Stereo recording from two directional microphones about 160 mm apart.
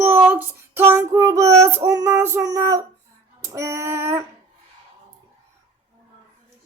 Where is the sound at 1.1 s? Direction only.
20° right (ahead or behind).